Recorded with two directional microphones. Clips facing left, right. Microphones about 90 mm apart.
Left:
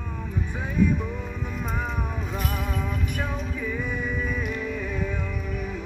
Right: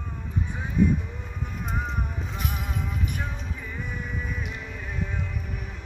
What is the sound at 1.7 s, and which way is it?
Vehicle, 90° left.